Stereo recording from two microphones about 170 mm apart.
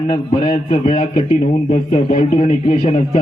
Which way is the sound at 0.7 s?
30° left (ahead or behind).